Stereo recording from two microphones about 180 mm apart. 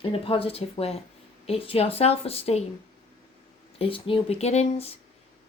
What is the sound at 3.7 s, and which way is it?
Speech, 30° left (ahead or behind).